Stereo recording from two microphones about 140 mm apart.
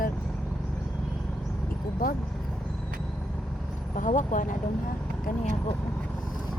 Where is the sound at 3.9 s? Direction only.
65° left (ahead or behind).